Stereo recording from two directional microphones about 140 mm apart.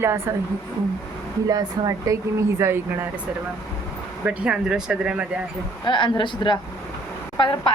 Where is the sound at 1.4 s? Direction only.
25° right (ahead or behind).